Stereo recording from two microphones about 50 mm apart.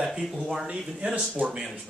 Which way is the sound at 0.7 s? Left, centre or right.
Right.